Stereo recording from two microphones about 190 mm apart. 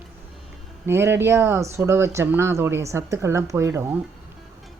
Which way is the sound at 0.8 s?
15° right (ahead or behind).